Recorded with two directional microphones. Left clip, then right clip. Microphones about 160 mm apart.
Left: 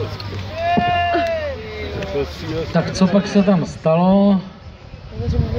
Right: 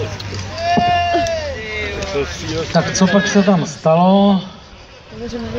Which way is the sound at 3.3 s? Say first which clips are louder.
Right 2 dB; 30° right (ahead or behind).